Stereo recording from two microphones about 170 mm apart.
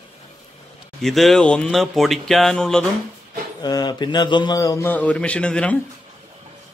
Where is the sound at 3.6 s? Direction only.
25° left (ahead or behind); by 5.8 s 5° left (ahead or behind).